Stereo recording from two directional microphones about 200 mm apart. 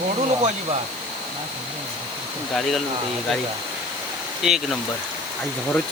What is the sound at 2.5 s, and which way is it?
Speech, centre (ahead or behind).